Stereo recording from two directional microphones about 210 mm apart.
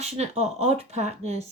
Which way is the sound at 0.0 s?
30° right (ahead or behind).